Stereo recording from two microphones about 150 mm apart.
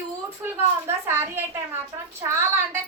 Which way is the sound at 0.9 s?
15° right (ahead or behind).